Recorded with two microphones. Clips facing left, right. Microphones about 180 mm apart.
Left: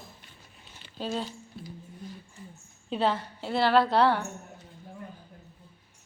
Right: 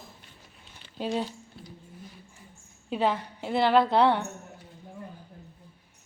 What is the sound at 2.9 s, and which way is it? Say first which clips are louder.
A woman's voice: right 1 dB; 15° right (ahead or behind).